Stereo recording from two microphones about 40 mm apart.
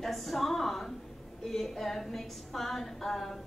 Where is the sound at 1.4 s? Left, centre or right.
Centre.